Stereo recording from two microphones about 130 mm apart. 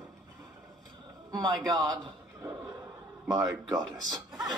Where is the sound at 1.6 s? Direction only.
30° right (ahead or behind).